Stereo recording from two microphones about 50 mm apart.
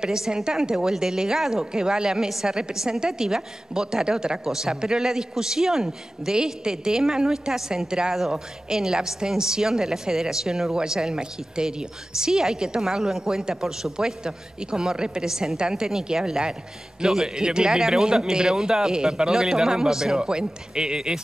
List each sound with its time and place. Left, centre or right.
0.0 s a woman's voice: centre